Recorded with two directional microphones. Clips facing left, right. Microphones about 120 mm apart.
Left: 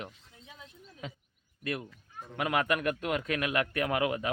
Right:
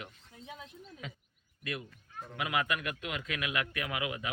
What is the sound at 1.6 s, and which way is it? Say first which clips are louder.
A man's voice: left 4 dB; 40° left (ahead or behind).